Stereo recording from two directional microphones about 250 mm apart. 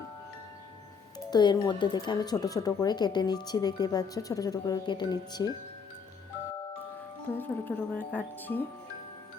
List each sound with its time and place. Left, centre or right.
1.3 s speech: centre
7.3 s speech: centre